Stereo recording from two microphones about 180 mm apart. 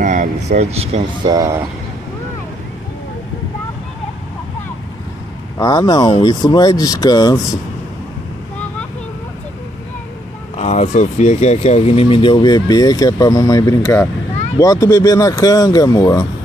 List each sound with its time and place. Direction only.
0.0 s speech: 45° right (ahead or behind)
1.2 s speech: 20° right (ahead or behind)
5.6 s speech: 20° left (ahead or behind)
10.6 s speech: 40° left (ahead or behind); by 16.3 s 20° left (ahead or behind)